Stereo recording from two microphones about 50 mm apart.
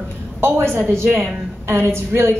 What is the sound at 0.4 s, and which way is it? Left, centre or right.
Speech, right.